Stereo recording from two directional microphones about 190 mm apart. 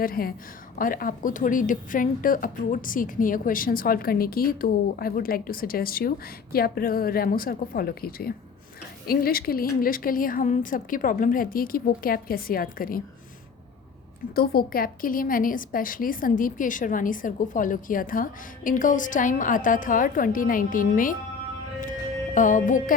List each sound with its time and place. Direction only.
0.0 s a woman's voice: 50° left (ahead or behind)
14.3 s a woman's voice: 55° left (ahead or behind)
22.4 s a woman's voice: 45° left (ahead or behind)